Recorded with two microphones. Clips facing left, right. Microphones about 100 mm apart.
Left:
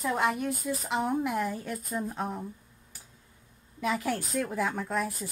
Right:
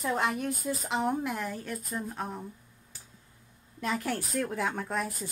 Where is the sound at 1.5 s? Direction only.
15° left (ahead or behind).